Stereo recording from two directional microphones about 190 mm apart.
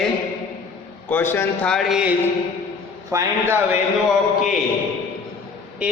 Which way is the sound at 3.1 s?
15° right (ahead or behind).